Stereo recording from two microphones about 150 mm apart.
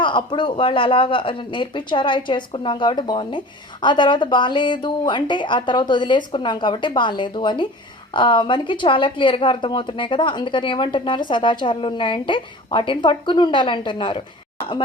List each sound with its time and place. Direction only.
0.0 s a woman's voice: 35° left (ahead or behind)